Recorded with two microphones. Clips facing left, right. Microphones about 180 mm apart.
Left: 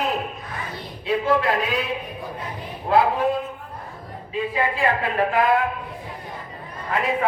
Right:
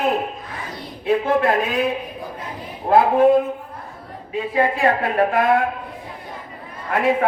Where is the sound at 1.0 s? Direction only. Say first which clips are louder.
Right 3 dB; 50° right (ahead or behind).